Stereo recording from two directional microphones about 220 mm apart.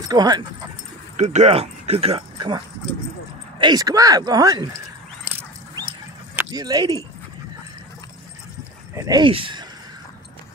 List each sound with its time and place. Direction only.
0.1 s speech: 20° right (ahead or behind)
1.1 s speech: 30° right (ahead or behind); by 4.6 s 15° right (ahead or behind)
6.3 s speech: 15° right (ahead or behind)
8.9 s speech: 15° right (ahead or behind)